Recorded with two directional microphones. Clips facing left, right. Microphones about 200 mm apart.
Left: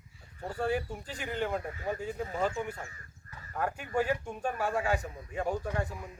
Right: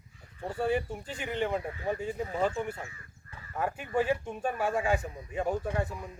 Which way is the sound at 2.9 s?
40° left (ahead or behind).